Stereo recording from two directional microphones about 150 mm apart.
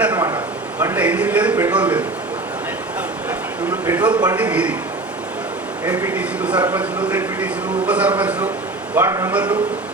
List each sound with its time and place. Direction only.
0.8 s a sound: 15° right (ahead or behind)
3.2 s a sound: 10° right (ahead or behind)
4.1 s a man's voice: 25° right (ahead or behind)
4.4 s a man's voice: 10° right (ahead or behind)
5.9 s a man's voice: 15° right (ahead or behind)
9.3 s a man's voice: 10° right (ahead or behind)